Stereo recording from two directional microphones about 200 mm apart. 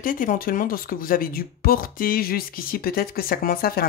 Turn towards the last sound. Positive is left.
turn(degrees=50)  # may be behind; listen again after turning